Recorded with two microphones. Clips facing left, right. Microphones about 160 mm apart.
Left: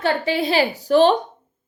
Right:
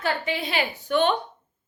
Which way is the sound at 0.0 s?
35° left (ahead or behind).